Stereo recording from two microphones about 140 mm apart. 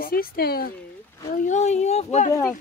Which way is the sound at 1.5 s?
55° left (ahead or behind).